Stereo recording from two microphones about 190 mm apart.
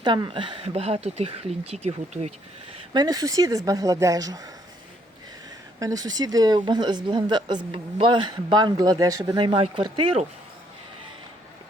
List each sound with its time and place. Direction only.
0.0 s speech: 25° right (ahead or behind)
2.9 s speech: 20° right (ahead or behind)
5.8 s speech: 20° right (ahead or behind)